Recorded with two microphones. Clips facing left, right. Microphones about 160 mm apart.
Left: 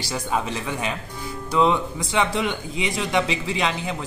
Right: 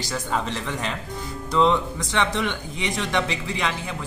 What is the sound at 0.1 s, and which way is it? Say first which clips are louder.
A man's voice: left 2 dB; 10° left (ahead or behind).